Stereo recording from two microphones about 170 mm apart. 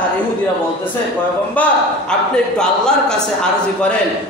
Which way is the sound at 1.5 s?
5° left (ahead or behind).